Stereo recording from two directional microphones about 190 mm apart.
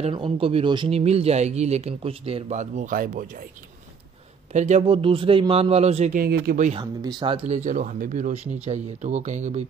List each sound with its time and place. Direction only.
0.0 s speech: 30° right (ahead or behind); by 3.4 s 45° right (ahead or behind)
4.5 s speech: 35° right (ahead or behind)
6.2 s speech: 55° right (ahead or behind)
6.8 s speech: 20° right (ahead or behind); by 9.7 s 35° right (ahead or behind)